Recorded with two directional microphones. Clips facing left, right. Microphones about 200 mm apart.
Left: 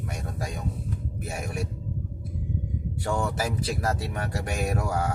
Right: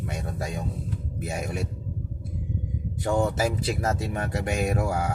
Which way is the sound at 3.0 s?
20° right (ahead or behind).